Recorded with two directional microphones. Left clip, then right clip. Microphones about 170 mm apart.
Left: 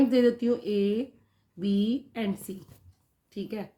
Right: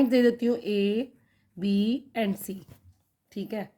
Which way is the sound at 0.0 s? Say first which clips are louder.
Right 1 dB; 45° right (ahead or behind).